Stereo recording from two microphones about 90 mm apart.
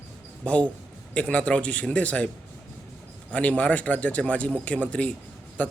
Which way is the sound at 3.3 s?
15° left (ahead or behind).